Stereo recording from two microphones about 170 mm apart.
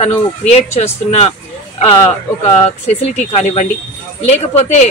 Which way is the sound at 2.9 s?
35° left (ahead or behind).